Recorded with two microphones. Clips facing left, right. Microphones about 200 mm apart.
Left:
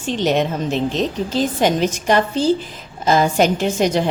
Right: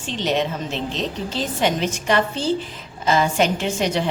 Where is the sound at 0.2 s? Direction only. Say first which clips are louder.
Left 3 dB; 45° left (ahead or behind).